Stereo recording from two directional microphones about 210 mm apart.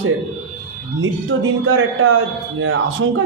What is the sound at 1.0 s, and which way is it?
A man's voice, 70° right (ahead or behind).